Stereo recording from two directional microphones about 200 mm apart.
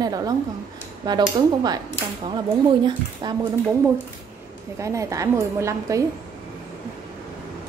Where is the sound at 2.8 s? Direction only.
20° right (ahead or behind).